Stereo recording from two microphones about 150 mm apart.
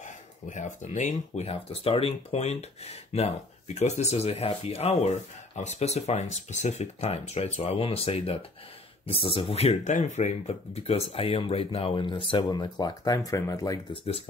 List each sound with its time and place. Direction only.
0.0 s speech: 55° left (ahead or behind); by 13.7 s 25° left (ahead or behind)